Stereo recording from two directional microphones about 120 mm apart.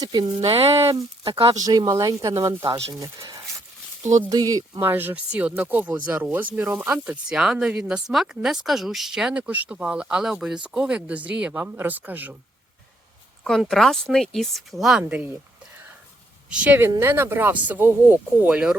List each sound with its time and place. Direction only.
0.0 s speech: 35° right (ahead or behind)
0.4 s speech: 55° right (ahead or behind)
1.5 s speech: 30° right (ahead or behind)
4.9 s speech: 15° right (ahead or behind)
13.6 s speech: centre (ahead or behind)
16.5 s speech: 10° right (ahead or behind)